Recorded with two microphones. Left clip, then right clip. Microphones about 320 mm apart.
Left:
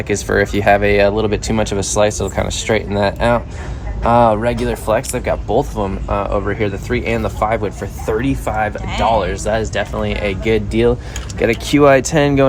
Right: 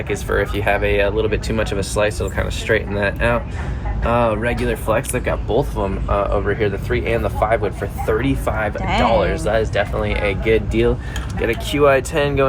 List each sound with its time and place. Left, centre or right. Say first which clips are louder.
0.1 s speech: left 5 dB; left